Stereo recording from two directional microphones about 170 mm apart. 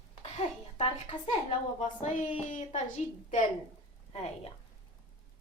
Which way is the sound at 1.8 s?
45° left (ahead or behind).